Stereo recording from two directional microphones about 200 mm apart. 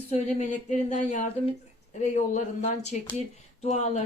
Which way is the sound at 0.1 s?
35° left (ahead or behind).